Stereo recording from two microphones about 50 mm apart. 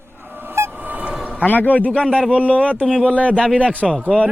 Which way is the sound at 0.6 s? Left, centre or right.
Right.